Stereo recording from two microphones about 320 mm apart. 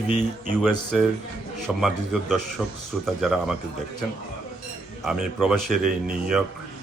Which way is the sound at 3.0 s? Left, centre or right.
Centre.